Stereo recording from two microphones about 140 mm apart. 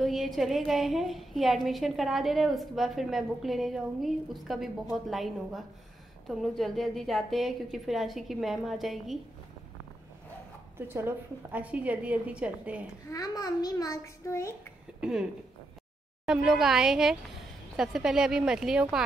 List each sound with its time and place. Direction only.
0.0 s a woman's voice: centre (ahead or behind)
10.8 s a woman's voice: 15° right (ahead or behind)
13.1 s a child's voice: 25° left (ahead or behind)
15.0 s speech: 5° right (ahead or behind)
16.3 s a woman's voice: 5° right (ahead or behind)